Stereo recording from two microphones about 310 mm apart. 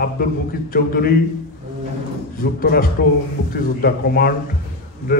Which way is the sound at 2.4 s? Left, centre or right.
Left.